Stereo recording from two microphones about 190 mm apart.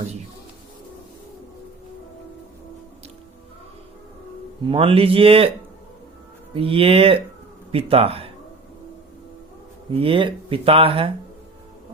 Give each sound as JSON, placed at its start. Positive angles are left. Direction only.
{"t": 4.7, "sound": "speech", "side_deg": -30}
{"t": 6.5, "sound": "speech", "side_deg": -30}
{"t": 9.9, "sound": "speech", "side_deg": -30}